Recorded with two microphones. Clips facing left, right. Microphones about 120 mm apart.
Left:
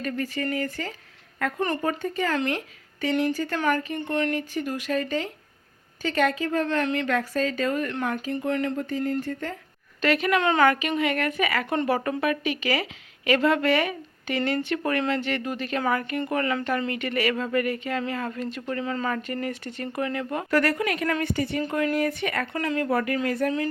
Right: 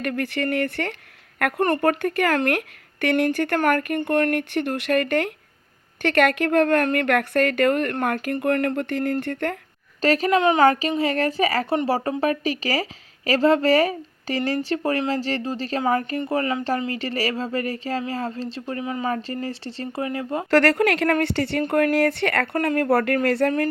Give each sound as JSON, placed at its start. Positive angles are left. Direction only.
{"t": 0.0, "sound": "a woman's voice", "side_deg": -70}
{"t": 10.0, "sound": "a woman's voice", "side_deg": -35}
{"t": 10.3, "sound": "a woman's voice", "side_deg": -20}
{"t": 16.3, "sound": "a woman's voice", "side_deg": -25}
{"t": 18.8, "sound": "speech", "side_deg": -20}
{"t": 19.1, "sound": "a woman's voice", "side_deg": -30}
{"t": 20.5, "sound": "a woman's voice", "side_deg": -85}
{"t": 21.7, "sound": "a woman's voice", "side_deg": -60}